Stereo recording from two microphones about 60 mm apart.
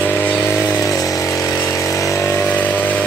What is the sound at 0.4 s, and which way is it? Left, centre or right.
Chainsaw, left.